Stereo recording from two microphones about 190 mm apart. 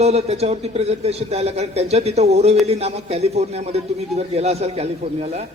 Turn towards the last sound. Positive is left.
turn(degrees=-35)  # may be behind; listen again after turning